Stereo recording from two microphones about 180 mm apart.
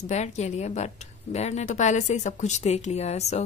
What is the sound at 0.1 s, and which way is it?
A woman's voice, 40° left (ahead or behind).